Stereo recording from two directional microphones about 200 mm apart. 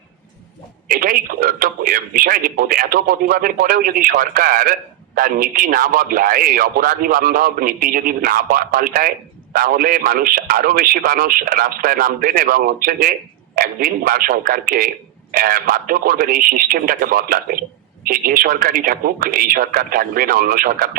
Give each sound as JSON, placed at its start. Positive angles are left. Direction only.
{"t": 0.9, "sound": "a man's voice", "side_deg": -45}